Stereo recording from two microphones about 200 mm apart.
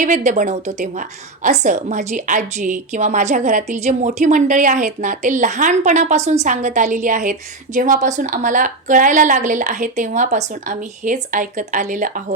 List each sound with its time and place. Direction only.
0.0 s a woman's voice: 40° right (ahead or behind)